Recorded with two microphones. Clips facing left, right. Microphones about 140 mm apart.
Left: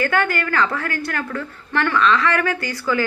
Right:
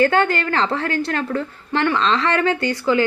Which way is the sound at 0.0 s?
30° right (ahead or behind).